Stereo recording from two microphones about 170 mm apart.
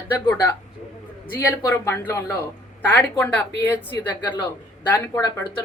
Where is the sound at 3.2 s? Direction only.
10° left (ahead or behind).